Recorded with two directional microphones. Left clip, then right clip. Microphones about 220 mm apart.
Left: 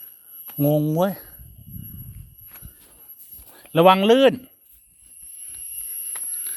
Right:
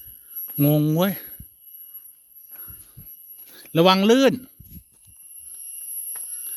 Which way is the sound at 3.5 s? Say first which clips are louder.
Left 2 dB; 60° right (ahead or behind).